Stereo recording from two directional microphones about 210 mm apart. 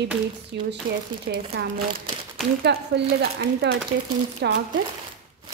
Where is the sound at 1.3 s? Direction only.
45° right (ahead or behind).